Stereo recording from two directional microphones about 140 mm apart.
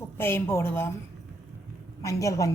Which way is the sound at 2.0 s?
25° left (ahead or behind).